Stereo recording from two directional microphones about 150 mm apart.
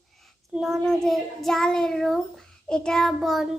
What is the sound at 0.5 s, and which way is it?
Child singing, centre (ahead or behind).